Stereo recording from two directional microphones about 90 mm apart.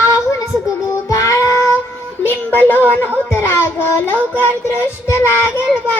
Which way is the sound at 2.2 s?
25° left (ahead or behind).